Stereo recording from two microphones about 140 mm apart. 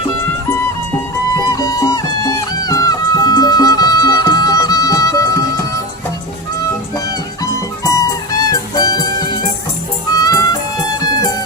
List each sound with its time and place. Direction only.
1.5 s music: 25° left (ahead or behind)
7.4 s music: 25° left (ahead or behind)